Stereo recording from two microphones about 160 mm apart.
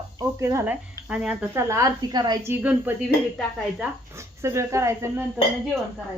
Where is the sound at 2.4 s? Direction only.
10° right (ahead or behind).